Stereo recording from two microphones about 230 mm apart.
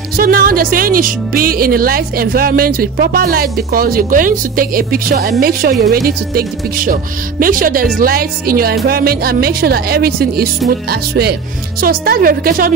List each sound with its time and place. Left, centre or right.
0.1 s speech: right